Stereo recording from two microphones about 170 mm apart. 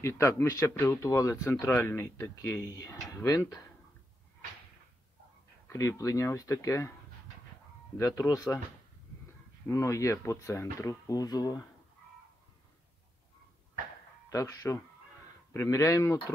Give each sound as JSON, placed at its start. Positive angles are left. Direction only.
{"t": 0.0, "sound": "speech", "side_deg": 15}
{"t": 5.7, "sound": "speech", "side_deg": 20}
{"t": 8.0, "sound": "speech", "side_deg": 20}
{"t": 9.7, "sound": "speech", "side_deg": 15}
{"t": 14.3, "sound": "speech", "side_deg": 20}